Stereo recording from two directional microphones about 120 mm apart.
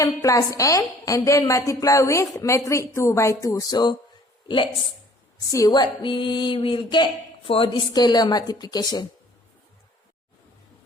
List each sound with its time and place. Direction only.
0.0 s a woman's voice: 30° left (ahead or behind); by 4.7 s 45° left (ahead or behind)
5.5 s speech: 30° left (ahead or behind)